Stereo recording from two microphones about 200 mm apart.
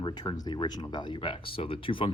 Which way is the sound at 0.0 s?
20° left (ahead or behind).